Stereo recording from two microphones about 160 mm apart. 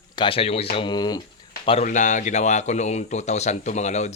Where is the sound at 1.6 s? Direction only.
40° left (ahead or behind).